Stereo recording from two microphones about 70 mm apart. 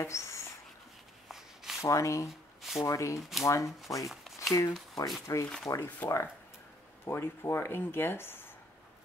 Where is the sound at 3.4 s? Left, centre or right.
Left.